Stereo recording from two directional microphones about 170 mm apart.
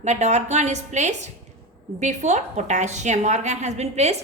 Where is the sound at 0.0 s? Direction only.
40° right (ahead or behind).